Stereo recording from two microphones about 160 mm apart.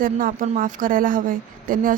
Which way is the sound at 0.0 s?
60° right (ahead or behind).